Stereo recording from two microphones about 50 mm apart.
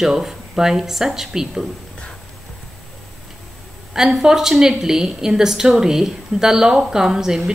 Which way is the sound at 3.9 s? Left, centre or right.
Centre.